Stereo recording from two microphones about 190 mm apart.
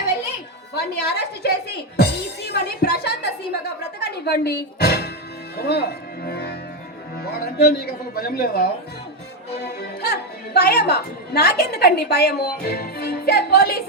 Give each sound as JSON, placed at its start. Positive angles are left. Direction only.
{"t": 0.7, "sound": "a woman's voice", "side_deg": 60}
{"t": 4.0, "sound": "music", "side_deg": 60}
{"t": 7.2, "sound": "a woman's voice", "side_deg": 55}
{"t": 10.0, "sound": "a woman's voice", "side_deg": 55}